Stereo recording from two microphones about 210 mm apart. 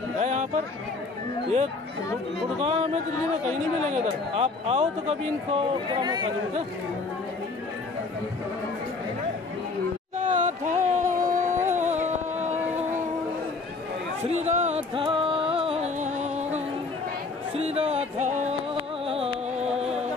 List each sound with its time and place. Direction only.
0.2 s speech: 35° right (ahead or behind)
2.6 s speech: 30° right (ahead or behind)
10.1 s a sound: 35° right (ahead or behind)
14.2 s music: 30° right (ahead or behind)
17.6 s music: 30° right (ahead or behind)